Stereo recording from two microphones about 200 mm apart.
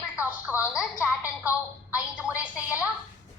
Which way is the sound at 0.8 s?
5° right (ahead or behind).